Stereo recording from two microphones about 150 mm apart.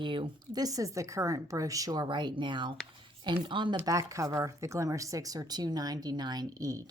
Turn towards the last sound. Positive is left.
turn(degrees=-25)  # may be behind; listen again after turning